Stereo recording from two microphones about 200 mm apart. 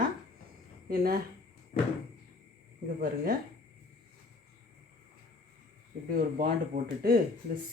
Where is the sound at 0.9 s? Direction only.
50° right (ahead or behind).